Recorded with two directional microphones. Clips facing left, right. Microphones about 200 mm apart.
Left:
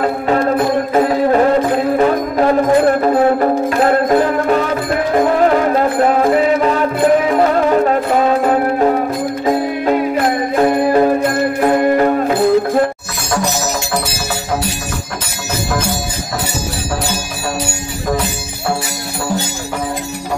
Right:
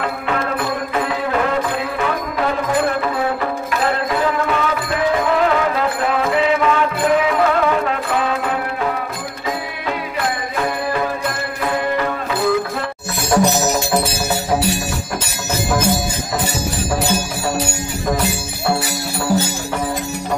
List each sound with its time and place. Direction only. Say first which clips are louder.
0.0 s music: left 7 dB; 40° left (ahead or behind)
13.3 s music: right 3 dB; 20° right (ahead or behind)